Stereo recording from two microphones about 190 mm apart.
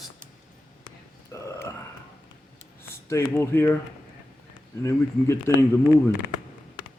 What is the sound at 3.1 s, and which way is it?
Speech, 15° left (ahead or behind).